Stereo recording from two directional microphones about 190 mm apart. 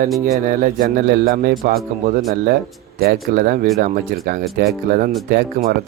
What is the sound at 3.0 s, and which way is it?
Speech, 55° right (ahead or behind).